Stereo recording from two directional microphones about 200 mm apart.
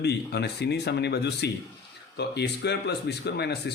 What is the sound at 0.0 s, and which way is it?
Speech, 55° left (ahead or behind).